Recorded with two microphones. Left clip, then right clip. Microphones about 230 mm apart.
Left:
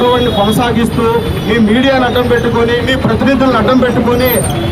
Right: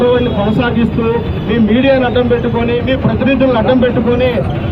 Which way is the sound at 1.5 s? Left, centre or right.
Centre.